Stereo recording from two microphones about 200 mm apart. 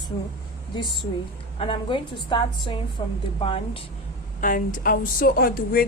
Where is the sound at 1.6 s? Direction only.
25° left (ahead or behind).